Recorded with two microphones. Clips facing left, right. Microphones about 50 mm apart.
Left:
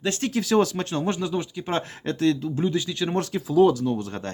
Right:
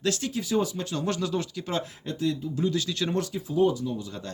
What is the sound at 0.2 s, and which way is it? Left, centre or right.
Speech, left.